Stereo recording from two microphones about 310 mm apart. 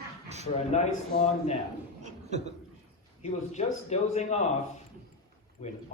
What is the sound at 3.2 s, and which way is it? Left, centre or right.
Speech, left.